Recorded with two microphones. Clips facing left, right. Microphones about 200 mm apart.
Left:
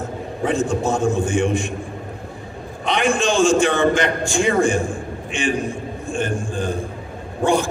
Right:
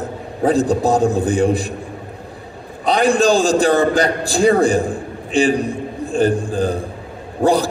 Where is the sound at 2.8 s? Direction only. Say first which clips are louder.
Right 5 dB; 35° right (ahead or behind).